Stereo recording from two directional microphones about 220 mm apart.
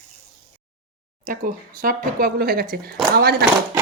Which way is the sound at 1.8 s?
40° right (ahead or behind).